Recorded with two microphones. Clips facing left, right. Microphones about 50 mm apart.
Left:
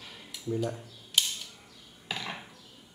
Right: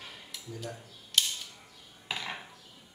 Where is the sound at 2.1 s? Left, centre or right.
Centre.